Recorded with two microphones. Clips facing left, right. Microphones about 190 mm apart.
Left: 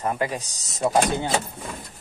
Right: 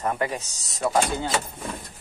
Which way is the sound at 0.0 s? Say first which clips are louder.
Left 1 dB; 15° left (ahead or behind).